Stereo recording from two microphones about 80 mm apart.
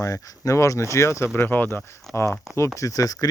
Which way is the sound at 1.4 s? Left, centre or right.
Left.